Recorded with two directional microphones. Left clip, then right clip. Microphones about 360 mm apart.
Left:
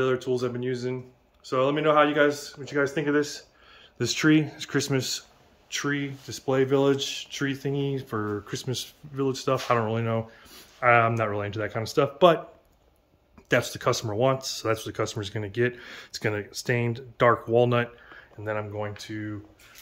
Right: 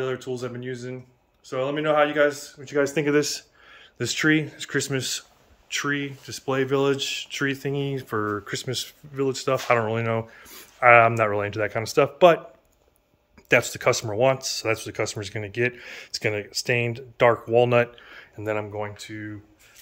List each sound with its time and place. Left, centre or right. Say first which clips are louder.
0.0 s speech: left 3 dB; centre
2.7 s speech: right 3 dB; right
3.7 s speech: right 1 dB; centre
13.5 s speech: right 4 dB; centre
17.9 s a sound: right 4 dB; right
18.7 s speech: right 1 dB; centre